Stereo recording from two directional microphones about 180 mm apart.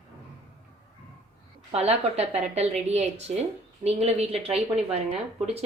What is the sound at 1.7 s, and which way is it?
A woman's voice, 35° right (ahead or behind).